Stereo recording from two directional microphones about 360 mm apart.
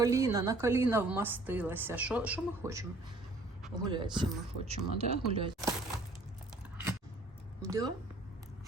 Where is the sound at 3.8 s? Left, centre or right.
Centre.